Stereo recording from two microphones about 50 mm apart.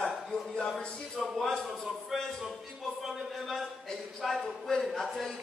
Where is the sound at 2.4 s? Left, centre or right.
Centre.